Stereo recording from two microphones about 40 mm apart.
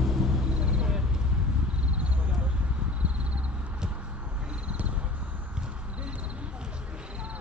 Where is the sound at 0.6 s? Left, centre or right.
Right.